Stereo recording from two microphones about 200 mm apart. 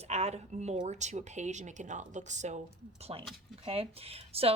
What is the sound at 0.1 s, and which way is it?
A woman's voice, 35° right (ahead or behind).